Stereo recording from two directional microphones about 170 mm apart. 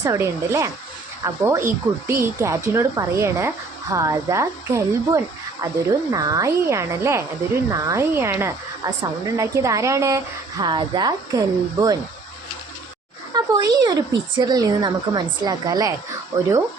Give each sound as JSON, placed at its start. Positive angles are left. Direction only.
{"t": 0.0, "sound": "a woman's voice", "side_deg": -20}
{"t": 13.3, "sound": "a woman's voice", "side_deg": -20}